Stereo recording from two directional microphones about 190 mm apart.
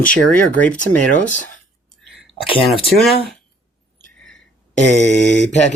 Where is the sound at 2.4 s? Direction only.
30° left (ahead or behind).